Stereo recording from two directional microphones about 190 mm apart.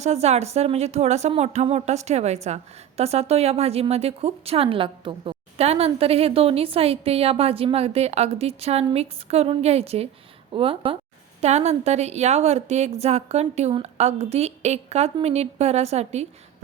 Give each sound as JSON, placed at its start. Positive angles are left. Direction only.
{"t": 0.0, "sound": "a woman's voice", "side_deg": -35}